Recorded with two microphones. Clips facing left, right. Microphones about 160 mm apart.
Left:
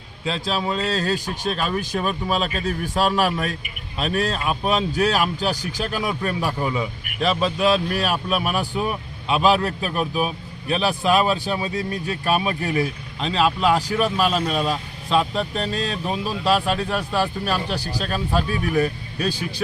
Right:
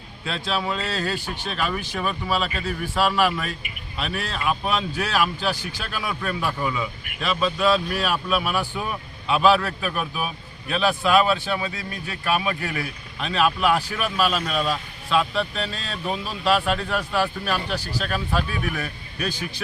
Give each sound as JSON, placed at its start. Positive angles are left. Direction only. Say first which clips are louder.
{"t": 0.3, "sound": "a man's voice", "louder": "left 1 dB", "side_deg": 35}
{"t": 7.9, "sound": "speech", "louder": "left 1 dB", "side_deg": 40}
{"t": 8.7, "sound": "speech", "louder": "left 5 dB", "side_deg": 15}
{"t": 9.2, "sound": "a man's voice", "louder": "even", "side_deg": 30}
{"t": 12.6, "sound": "a man's voice", "louder": "left 7 dB", "side_deg": 20}
{"t": 15.2, "sound": "speech", "louder": "left 1 dB", "side_deg": 20}
{"t": 15.5, "sound": "a man's voice", "louder": "left 5 dB", "side_deg": 40}